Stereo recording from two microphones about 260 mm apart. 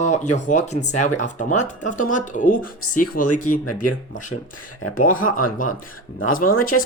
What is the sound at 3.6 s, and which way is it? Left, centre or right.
Speech, left.